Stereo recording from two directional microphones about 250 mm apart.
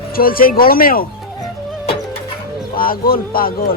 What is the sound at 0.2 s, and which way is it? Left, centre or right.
Speech, left.